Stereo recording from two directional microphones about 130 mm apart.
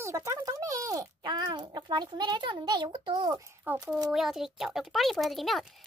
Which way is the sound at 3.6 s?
10° right (ahead or behind).